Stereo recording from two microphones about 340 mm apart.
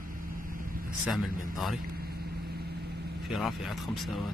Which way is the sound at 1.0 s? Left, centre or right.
Centre.